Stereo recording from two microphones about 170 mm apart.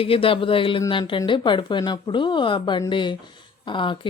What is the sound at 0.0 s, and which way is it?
Speech, 30° left (ahead or behind).